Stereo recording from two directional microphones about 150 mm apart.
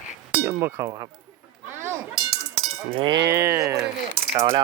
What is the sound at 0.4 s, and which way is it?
Speech, 15° right (ahead or behind).